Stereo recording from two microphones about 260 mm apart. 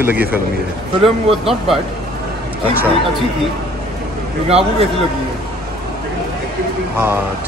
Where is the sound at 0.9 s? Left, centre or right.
Right.